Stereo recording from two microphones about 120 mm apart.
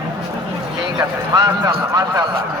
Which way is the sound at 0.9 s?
30° right (ahead or behind).